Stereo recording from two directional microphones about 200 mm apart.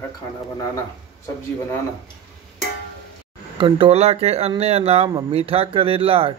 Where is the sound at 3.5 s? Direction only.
25° right (ahead or behind).